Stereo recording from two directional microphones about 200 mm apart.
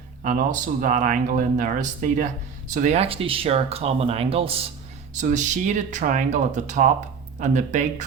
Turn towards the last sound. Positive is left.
turn(degrees=-40)  # may be behind; listen again after turning